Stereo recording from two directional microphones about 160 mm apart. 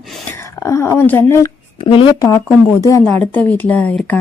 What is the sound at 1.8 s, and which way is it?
Speech, 30° left (ahead or behind).